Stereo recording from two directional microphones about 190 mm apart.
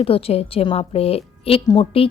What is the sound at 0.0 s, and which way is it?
A woman's voice, 30° left (ahead or behind).